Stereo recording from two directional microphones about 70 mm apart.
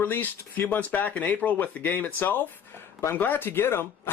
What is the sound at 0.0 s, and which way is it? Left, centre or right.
Speech, left.